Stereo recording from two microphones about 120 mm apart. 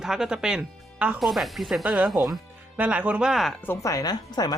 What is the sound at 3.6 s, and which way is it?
Speech, 20° left (ahead or behind).